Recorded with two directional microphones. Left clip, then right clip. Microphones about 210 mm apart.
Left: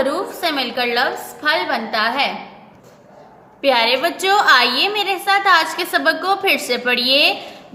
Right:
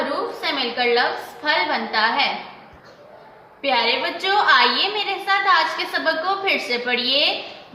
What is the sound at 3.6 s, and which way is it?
A woman's voice, 50° left (ahead or behind).